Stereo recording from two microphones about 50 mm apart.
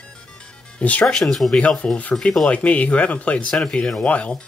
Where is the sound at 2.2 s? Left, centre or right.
Centre.